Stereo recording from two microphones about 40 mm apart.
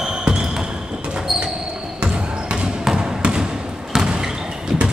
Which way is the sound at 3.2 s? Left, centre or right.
Right.